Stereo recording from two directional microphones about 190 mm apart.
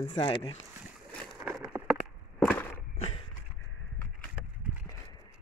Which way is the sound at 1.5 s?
5° right (ahead or behind).